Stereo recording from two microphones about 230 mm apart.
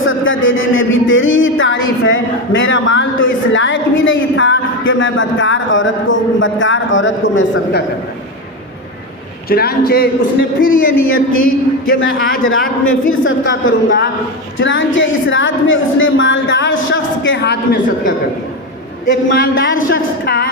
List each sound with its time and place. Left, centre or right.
0.0 s a man's voice: left
9.5 s a man's voice: left
13.1 s a man's voice: left